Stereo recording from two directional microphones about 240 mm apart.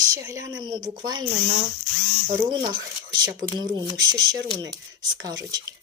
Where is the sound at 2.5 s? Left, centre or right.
Centre.